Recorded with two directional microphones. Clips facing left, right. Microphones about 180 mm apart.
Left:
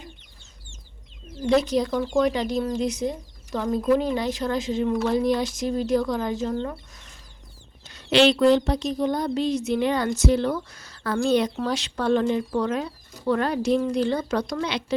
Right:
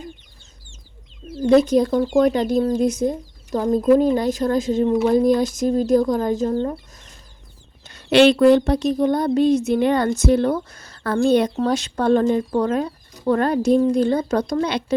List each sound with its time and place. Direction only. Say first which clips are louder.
1.5 s speech: right 6 dB; 50° right (ahead or behind)
7.9 s speech: right 5 dB; 60° right (ahead or behind)